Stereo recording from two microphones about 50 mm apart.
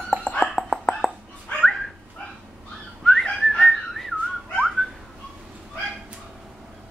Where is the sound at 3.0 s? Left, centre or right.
Centre.